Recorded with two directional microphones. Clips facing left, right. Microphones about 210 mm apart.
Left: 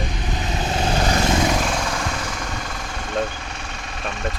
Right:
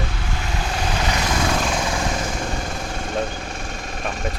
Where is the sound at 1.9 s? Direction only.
25° right (ahead or behind); by 4.4 s 45° right (ahead or behind).